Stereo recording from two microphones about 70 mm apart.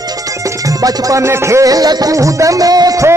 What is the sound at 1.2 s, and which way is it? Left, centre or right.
Music, right.